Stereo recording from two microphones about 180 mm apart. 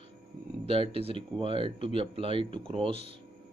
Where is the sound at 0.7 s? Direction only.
30° right (ahead or behind).